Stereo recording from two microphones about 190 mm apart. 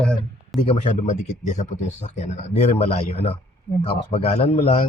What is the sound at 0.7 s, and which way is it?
Speech, 40° left (ahead or behind).